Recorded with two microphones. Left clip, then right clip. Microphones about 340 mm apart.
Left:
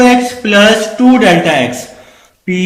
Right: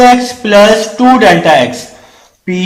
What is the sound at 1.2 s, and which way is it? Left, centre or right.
Mantra, right.